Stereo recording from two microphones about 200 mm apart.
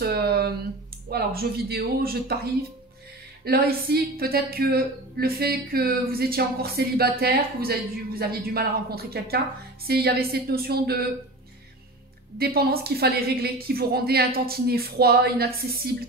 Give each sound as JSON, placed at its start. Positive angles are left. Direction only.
{"t": 0.0, "sound": "a sound", "side_deg": -50}
{"t": 1.0, "sound": "a woman's voice", "side_deg": -50}
{"t": 12.4, "sound": "a woman's voice", "side_deg": -50}